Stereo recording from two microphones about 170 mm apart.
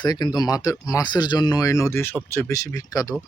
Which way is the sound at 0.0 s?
25° left (ahead or behind).